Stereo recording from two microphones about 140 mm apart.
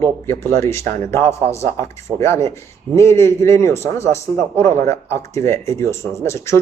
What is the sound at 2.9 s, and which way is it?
Speech, 20° left (ahead or behind).